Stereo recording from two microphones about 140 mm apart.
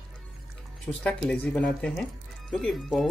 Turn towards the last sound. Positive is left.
turn(degrees=0)  # may be behind; listen again after turning